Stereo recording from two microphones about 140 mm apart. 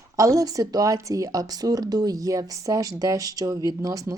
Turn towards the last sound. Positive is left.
turn(degrees=-25)  # may be behind; listen again after turning